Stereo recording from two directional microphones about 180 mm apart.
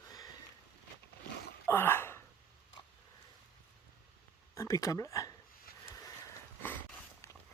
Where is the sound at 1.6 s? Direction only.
15° left (ahead or behind).